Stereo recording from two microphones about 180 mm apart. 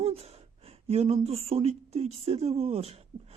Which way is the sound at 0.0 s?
35° right (ahead or behind).